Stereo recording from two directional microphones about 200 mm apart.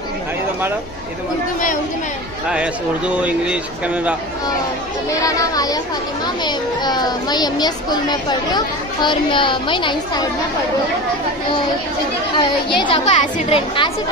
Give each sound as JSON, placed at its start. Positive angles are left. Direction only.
{"t": 3.2, "sound": "speech", "side_deg": -5}
{"t": 5.2, "sound": "a child's voice", "side_deg": 15}
{"t": 12.4, "sound": "speech", "side_deg": 25}